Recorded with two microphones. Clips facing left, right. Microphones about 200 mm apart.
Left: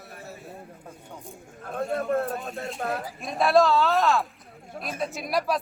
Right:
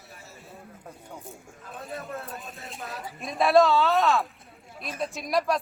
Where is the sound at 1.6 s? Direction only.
55° left (ahead or behind).